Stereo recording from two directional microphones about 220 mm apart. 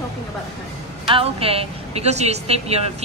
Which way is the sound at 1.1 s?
25° right (ahead or behind).